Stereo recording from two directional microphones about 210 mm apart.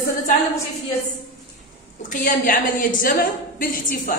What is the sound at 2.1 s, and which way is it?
A woman's voice, 40° left (ahead or behind).